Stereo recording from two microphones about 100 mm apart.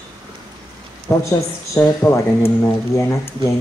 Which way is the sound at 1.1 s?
25° left (ahead or behind).